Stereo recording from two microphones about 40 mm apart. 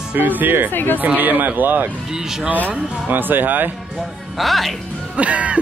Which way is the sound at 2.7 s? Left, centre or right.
Right.